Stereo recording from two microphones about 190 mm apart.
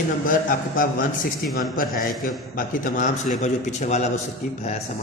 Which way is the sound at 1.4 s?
50° left (ahead or behind).